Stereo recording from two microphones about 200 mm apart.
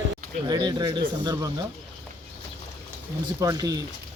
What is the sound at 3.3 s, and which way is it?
Speech, 15° right (ahead or behind).